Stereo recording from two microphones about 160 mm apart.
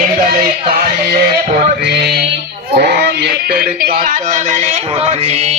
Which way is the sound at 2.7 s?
80° right.